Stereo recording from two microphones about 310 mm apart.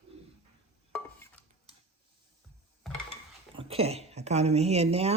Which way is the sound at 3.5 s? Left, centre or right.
Centre.